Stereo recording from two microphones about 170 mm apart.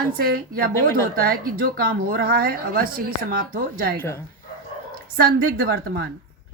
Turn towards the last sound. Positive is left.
turn(degrees=-75)  # may be behind; listen again after turning